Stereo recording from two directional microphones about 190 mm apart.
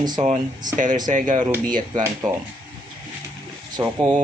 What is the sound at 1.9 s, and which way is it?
Speech, 20° right (ahead or behind).